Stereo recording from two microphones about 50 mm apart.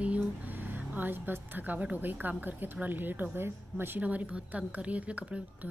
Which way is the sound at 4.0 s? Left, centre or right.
Right.